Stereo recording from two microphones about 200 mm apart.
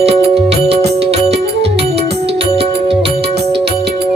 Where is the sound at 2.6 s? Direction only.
30° right (ahead or behind).